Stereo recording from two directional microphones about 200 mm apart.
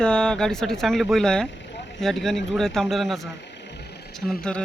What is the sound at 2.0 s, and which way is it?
Speech, centre (ahead or behind).